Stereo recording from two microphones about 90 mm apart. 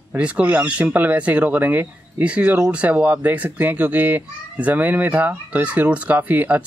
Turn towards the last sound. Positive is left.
turn(degrees=-20)  # may be behind; listen again after turning